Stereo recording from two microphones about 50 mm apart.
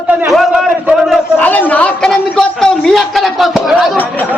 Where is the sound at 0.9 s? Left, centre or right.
Centre.